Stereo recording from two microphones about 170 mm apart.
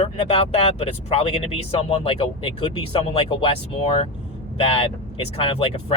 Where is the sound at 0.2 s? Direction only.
35° left (ahead or behind).